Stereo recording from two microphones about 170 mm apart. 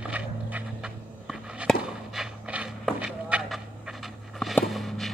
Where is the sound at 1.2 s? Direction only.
Centre (ahead or behind).